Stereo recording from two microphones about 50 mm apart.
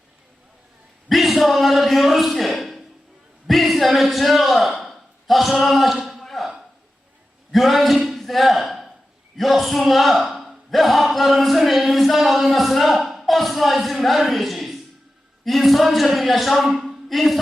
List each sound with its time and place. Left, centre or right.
1.0 s a man's voice: centre
3.4 s a sound: centre
15.4 s speech: centre